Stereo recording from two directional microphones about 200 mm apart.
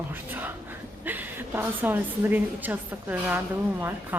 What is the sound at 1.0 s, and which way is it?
A woman's voice, 10° right (ahead or behind).